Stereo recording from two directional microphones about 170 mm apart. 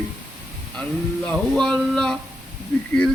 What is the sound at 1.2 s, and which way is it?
Speech, 5° left (ahead or behind).